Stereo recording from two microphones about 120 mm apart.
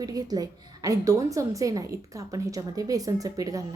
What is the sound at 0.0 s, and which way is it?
A woman's voice, 30° right (ahead or behind).